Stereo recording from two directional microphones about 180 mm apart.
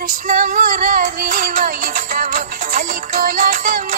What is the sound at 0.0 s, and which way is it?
Music, 50° right (ahead or behind).